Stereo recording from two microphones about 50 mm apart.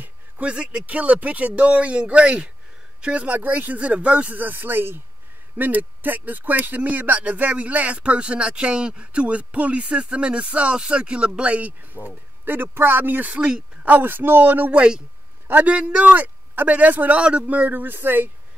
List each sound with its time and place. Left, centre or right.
0.0 s speech: right
3.3 s speech: right
4.3 s speech: right
14.0 s speech: right
14.7 s speech: right
15.4 s speech: right
15.7 s speech: right
17.2 s speech: right
17.6 s speech: right